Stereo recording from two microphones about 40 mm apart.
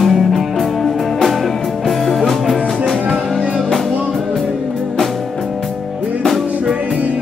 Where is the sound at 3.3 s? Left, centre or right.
Right.